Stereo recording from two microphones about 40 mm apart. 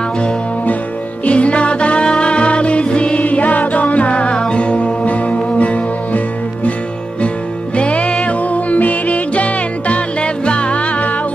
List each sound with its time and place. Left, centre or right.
1.2 s music: left
7.7 s music: left